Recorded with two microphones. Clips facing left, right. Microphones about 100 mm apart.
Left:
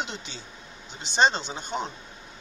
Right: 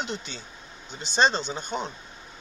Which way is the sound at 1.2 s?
15° left (ahead or behind).